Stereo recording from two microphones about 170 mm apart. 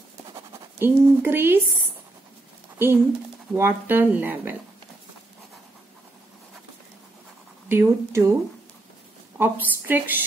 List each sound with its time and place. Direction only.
0.7 s speech: 15° right (ahead or behind)
2.8 s speech: 10° right (ahead or behind)
7.6 s speech: 15° right (ahead or behind)
9.4 s speech: 10° right (ahead or behind)